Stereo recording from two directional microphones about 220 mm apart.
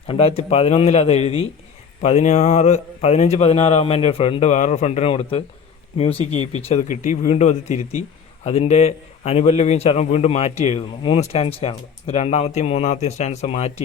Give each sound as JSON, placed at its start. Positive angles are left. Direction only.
{"t": 0.1, "sound": "a man's voice", "side_deg": 25}